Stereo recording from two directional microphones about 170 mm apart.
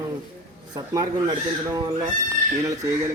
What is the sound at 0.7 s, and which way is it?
Speech, 25° right (ahead or behind).